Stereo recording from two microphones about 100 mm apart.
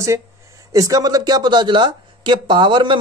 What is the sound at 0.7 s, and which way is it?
Speech, 35° right (ahead or behind).